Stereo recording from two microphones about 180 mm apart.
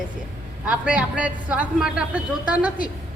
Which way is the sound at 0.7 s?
5° right (ahead or behind).